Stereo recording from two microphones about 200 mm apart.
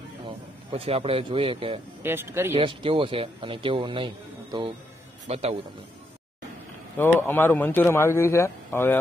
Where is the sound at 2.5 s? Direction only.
25° right (ahead or behind).